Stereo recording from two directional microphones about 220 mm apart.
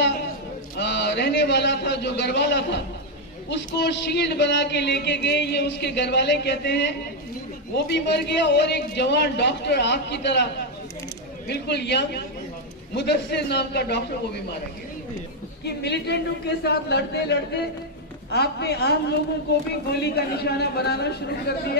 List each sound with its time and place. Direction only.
0.7 s a man's voice: 50° left (ahead or behind)
15.6 s a man's voice: 50° left (ahead or behind)
20.0 s a man's voice: 45° left (ahead or behind)